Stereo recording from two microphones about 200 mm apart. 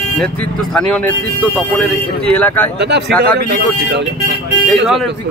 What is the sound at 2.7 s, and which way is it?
Speech, 60° right (ahead or behind).